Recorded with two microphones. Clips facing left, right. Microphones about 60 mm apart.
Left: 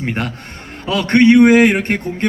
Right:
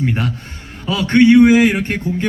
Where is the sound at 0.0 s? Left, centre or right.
Left.